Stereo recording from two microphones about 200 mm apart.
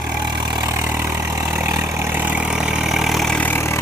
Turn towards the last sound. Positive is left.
turn(degrees=10)  # may be behind; listen again after turning